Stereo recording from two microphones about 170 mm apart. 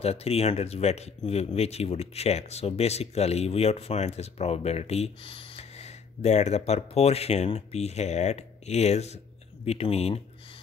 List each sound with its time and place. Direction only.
0.0 s speech: 35° left (ahead or behind)